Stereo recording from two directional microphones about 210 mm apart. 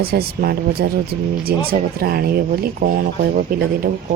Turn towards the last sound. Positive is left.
turn(degrees=-45)  # may be behind; listen again after turning